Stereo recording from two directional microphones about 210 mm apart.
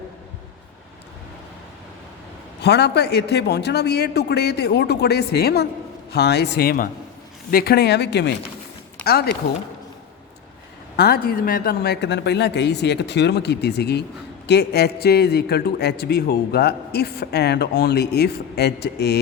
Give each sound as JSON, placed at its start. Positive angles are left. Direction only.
{"t": 2.6, "sound": "a man's voice", "side_deg": 55}
{"t": 10.9, "sound": "a man's voice", "side_deg": 45}